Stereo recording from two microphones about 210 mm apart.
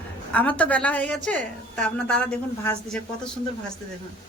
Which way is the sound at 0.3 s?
5° left (ahead or behind).